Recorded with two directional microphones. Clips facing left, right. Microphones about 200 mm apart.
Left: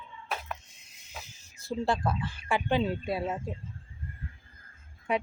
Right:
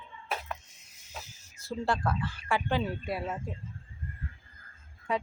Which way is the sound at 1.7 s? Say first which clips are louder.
Left 1 dB; 20° left (ahead or behind).